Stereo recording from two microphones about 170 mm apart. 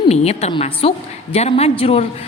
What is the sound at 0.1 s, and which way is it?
A woman's voice, 40° left (ahead or behind).